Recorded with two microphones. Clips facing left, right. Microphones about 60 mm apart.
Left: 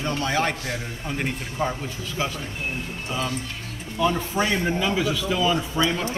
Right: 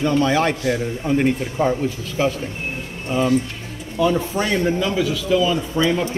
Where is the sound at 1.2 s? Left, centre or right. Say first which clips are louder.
Right 6 dB; centre.